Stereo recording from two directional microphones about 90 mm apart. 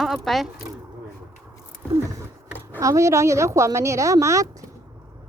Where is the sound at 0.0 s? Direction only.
Centre (ahead or behind).